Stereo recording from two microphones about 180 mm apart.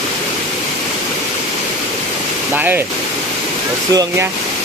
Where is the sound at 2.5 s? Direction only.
10° right (ahead or behind).